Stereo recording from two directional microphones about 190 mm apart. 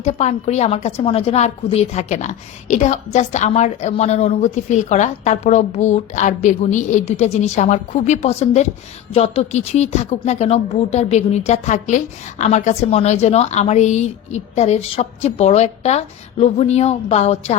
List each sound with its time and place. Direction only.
0.0 s a woman's voice: 35° left (ahead or behind)